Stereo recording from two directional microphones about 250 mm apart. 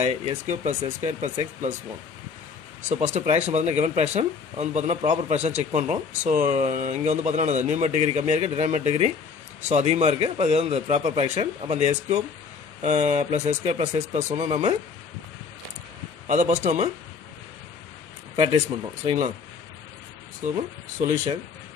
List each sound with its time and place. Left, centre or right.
0.0 s speech: right
2.9 s speech: right
16.3 s speech: right
18.3 s speech: right